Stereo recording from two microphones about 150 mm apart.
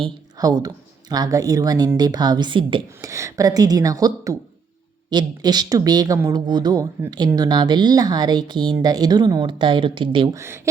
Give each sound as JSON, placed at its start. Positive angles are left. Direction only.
{"t": 0.3, "sound": "speech", "side_deg": -25}
{"t": 3.0, "sound": "speech", "side_deg": -20}
{"t": 10.3, "sound": "speech", "side_deg": -15}